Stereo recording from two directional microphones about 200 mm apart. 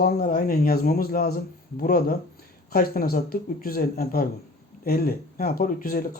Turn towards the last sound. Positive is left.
turn(degrees=45)  # may be behind; listen again after turning